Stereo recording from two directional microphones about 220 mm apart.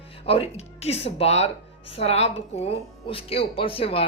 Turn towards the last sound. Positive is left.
turn(degrees=25)  # may be behind; listen again after turning